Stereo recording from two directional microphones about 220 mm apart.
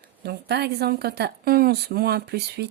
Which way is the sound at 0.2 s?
50° right (ahead or behind).